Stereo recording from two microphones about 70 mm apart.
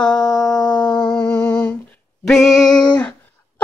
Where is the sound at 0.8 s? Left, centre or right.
Left.